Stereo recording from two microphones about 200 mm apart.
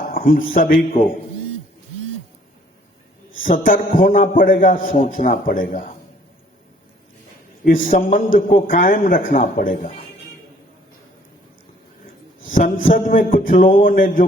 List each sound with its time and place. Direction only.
0.1 s a man's voice: 45° left (ahead or behind)
3.4 s a man's voice: 45° left (ahead or behind)
7.6 s a man's voice: 45° left (ahead or behind)
12.5 s a man's voice: 40° left (ahead or behind)